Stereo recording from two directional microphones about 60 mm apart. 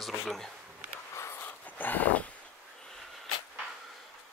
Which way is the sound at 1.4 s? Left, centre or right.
Left.